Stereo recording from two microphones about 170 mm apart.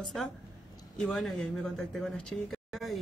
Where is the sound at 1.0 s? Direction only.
5° left (ahead or behind).